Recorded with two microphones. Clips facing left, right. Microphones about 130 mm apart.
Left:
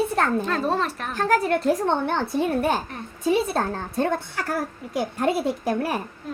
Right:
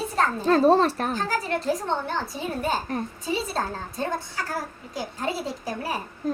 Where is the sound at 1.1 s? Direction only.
60° left (ahead or behind).